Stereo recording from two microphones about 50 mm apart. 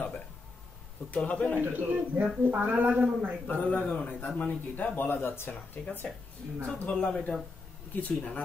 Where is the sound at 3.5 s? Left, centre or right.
Left.